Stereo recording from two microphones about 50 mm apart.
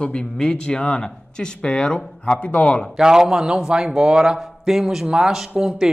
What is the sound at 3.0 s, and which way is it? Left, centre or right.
Speech, centre.